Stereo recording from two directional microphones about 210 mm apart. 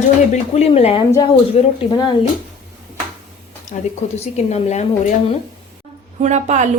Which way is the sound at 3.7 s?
30° left (ahead or behind).